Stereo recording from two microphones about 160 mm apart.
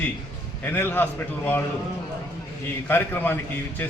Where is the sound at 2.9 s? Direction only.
15° left (ahead or behind).